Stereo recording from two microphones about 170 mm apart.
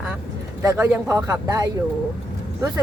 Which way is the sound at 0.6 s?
15° right (ahead or behind).